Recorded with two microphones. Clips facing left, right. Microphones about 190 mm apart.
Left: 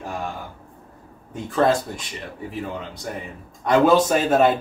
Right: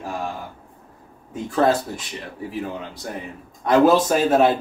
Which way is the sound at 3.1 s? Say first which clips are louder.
Even; centre (ahead or behind).